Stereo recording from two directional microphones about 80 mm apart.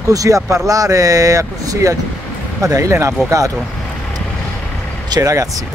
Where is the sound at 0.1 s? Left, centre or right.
Right.